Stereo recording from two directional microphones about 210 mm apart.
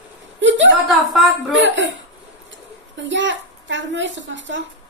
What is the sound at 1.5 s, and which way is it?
Speech, 60° right (ahead or behind).